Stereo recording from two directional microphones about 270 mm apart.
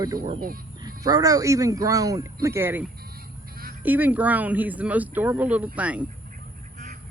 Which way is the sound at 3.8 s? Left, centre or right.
Centre.